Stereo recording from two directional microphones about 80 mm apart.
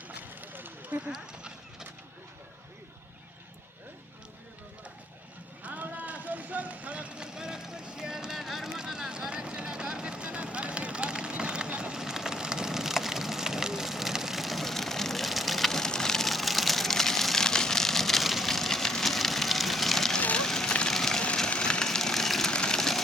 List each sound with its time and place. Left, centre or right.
0.1 s horse: right
5.6 s vehicle: centre
20.1 s fire: centre